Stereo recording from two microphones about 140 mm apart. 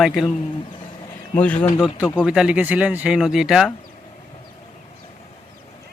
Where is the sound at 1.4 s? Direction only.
10° left (ahead or behind).